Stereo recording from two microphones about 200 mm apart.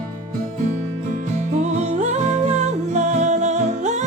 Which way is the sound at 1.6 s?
35° right (ahead or behind).